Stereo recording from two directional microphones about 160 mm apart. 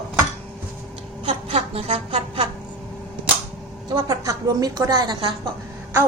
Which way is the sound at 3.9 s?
25° right (ahead or behind).